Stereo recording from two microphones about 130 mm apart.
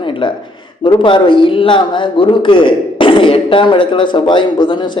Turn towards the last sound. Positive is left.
turn(degrees=35)  # may be behind; listen again after turning